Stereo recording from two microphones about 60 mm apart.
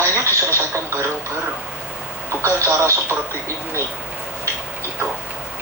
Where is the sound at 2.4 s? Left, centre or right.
Right.